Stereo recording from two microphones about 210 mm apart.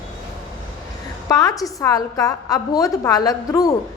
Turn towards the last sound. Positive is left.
turn(degrees=15)  # may be behind; listen again after turning